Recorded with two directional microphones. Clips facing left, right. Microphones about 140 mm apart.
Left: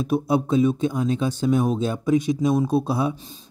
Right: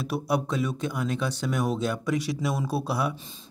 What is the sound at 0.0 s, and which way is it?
Speech, 20° left (ahead or behind).